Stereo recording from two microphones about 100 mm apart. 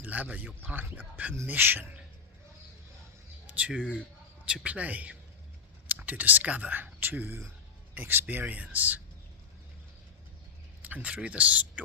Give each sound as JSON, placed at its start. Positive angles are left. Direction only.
{"t": 0.0, "sound": "speech", "side_deg": -15}
{"t": 3.4, "sound": "a sound", "side_deg": -15}
{"t": 4.4, "sound": "speech", "side_deg": -10}
{"t": 10.8, "sound": "speech", "side_deg": -15}